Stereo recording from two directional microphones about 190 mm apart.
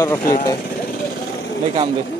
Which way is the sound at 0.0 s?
15° left (ahead or behind).